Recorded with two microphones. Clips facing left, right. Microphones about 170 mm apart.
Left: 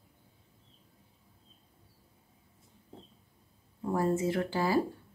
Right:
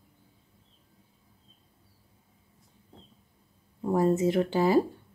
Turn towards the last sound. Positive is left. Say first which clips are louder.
# right 6 dB
turn(degrees=-20)  # may be behind; listen again after turning